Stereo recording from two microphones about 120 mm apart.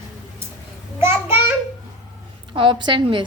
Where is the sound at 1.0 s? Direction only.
20° right (ahead or behind).